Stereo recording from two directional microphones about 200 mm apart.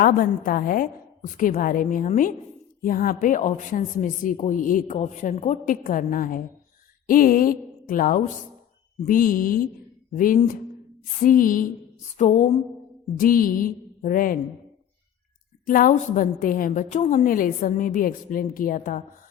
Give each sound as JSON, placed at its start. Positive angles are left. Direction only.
{"t": 0.0, "sound": "a woman's voice", "side_deg": 45}
{"t": 15.6, "sound": "a woman's voice", "side_deg": 45}